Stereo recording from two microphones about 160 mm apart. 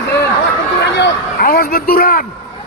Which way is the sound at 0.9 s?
80° left.